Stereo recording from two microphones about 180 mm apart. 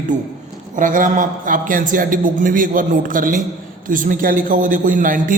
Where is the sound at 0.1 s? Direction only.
40° right (ahead or behind).